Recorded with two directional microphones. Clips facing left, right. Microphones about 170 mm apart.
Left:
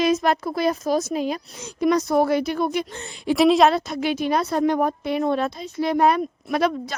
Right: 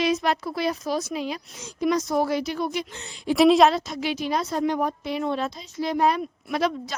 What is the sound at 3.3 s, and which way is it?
Speech, centre (ahead or behind).